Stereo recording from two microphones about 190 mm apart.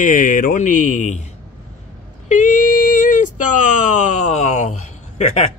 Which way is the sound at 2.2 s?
40° left (ahead or behind).